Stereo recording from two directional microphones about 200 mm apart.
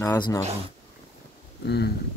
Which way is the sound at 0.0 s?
15° left (ahead or behind).